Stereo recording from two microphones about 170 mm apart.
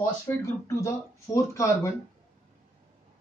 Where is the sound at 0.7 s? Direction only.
15° left (ahead or behind).